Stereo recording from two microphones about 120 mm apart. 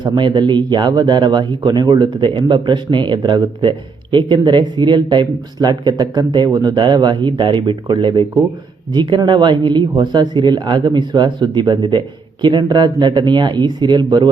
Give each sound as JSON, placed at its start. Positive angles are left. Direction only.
{"t": 0.0, "sound": "speech", "side_deg": -40}